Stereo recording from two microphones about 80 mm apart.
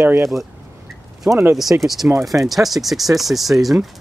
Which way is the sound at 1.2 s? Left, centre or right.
Right.